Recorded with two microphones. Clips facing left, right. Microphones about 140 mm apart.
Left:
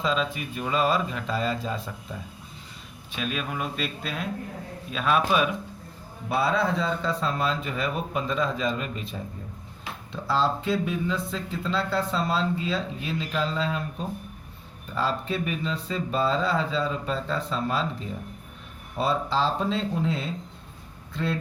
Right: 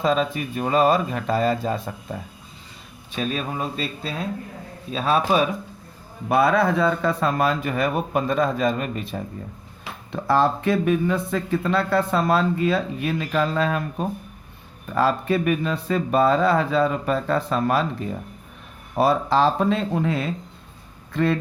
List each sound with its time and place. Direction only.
0.0 s speech: 50° right (ahead or behind)
3.1 s speech: 35° right (ahead or behind)
6.4 s speech: 70° right (ahead or behind)
18.9 s speech: 75° right (ahead or behind)
21.1 s speech: 60° right (ahead or behind)